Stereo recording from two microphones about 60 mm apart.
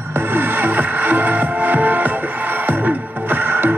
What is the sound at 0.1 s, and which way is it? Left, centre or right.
Music, right.